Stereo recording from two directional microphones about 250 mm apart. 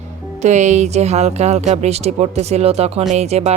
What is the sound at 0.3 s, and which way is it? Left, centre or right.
Speech, right.